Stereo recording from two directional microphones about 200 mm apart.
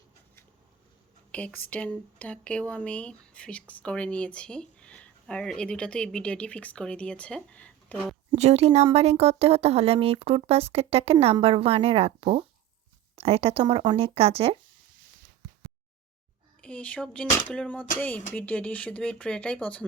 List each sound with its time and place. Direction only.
1.3 s speech: 5° left (ahead or behind)
8.3 s speech: 30° right (ahead or behind)
16.6 s speech: 5° left (ahead or behind)